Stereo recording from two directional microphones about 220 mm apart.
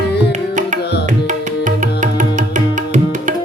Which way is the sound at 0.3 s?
35° right (ahead or behind).